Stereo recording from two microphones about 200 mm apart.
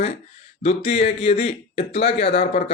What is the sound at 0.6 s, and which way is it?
Speech, 30° left (ahead or behind).